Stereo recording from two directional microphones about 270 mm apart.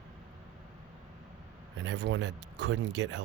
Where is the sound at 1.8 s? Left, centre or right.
Right.